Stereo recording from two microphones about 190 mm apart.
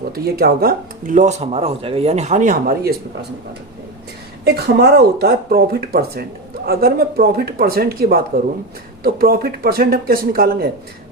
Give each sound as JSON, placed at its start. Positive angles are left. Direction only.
{"t": 0.1, "sound": "speech", "side_deg": -55}
{"t": 4.4, "sound": "speech", "side_deg": -55}